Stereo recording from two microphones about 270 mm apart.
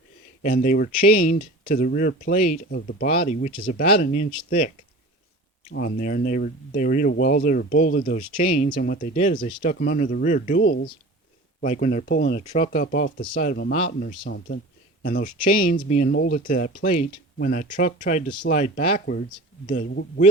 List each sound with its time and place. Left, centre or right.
0.4 s speech: left
5.6 s speech: left